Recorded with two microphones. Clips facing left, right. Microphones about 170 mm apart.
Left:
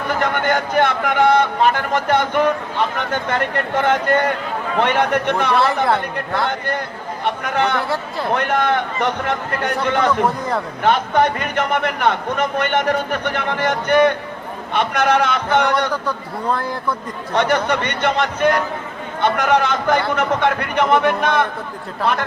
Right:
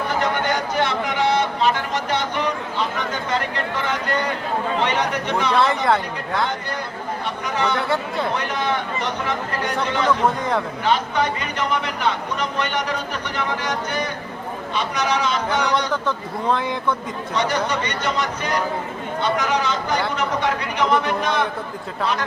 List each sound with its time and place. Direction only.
0.2 s a man's voice: 55° left (ahead or behind)
7.3 s a man's voice: 55° left (ahead or behind)
16.5 s speech: 5° left (ahead or behind)
17.3 s a man's voice: 55° left (ahead or behind)